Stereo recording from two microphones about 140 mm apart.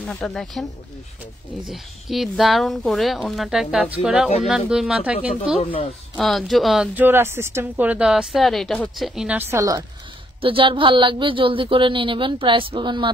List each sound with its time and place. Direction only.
0.0 s speech: centre (ahead or behind)
1.7 s speech: centre (ahead or behind)
5.6 s speech: 40° left (ahead or behind)
6.1 s speech: centre (ahead or behind)
7.0 s speech: 15° right (ahead or behind)
9.4 s a woman's voice: 20° right (ahead or behind)
10.4 s a woman's voice: 40° right (ahead or behind)